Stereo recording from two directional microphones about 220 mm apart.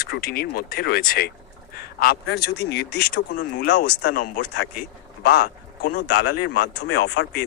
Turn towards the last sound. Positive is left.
turn(degrees=50)  # may be behind; listen again after turning